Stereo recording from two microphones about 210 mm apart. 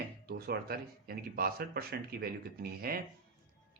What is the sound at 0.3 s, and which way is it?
Speech, 50° right (ahead or behind).